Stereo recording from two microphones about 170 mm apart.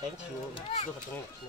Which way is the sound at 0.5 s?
35° left (ahead or behind).